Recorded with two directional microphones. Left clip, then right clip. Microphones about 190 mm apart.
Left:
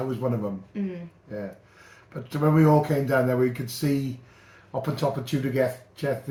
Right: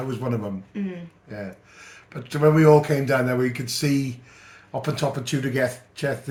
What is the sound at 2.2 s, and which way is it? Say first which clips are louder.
Speech: right 5 dB; 60° right (ahead or behind).